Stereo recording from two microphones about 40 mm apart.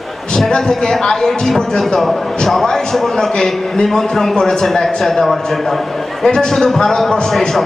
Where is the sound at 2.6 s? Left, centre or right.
Centre.